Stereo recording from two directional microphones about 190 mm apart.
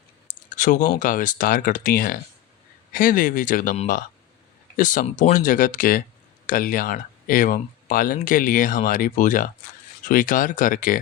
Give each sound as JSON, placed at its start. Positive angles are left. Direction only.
{"t": 0.5, "sound": "speech", "side_deg": 45}
{"t": 4.8, "sound": "speech", "side_deg": 45}